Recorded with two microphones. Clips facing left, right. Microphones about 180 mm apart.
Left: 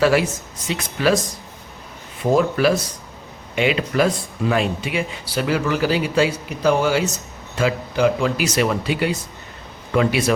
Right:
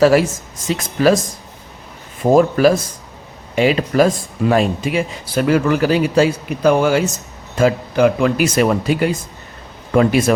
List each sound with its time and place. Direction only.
0.0 s speech: 40° right (ahead or behind)
2.3 s speech: 45° right (ahead or behind)